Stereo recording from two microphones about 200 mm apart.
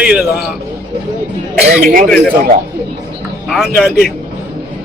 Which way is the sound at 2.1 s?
5° left (ahead or behind).